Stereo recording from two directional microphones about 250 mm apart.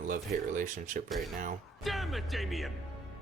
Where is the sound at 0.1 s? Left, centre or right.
Right.